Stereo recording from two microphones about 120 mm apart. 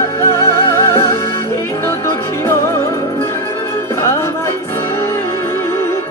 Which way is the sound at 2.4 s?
20° left (ahead or behind).